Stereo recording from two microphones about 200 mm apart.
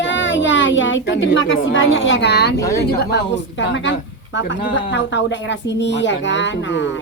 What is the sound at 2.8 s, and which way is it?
Speech, 55° left (ahead or behind).